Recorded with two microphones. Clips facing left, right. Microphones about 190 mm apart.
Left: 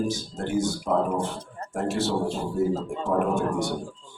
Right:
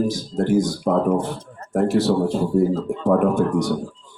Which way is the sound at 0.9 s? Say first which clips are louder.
Right 5 dB; 60° right (ahead or behind).